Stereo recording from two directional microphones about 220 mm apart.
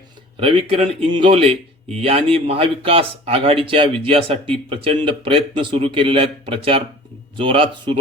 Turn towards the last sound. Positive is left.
turn(degrees=-25)  # may be behind; listen again after turning